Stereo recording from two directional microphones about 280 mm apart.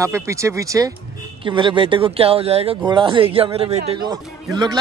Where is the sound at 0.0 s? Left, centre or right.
Centre.